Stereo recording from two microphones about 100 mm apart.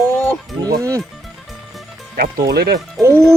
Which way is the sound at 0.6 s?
35° right (ahead or behind).